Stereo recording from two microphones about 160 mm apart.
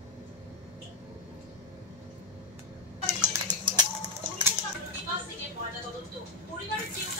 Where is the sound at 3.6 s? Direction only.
30° right (ahead or behind).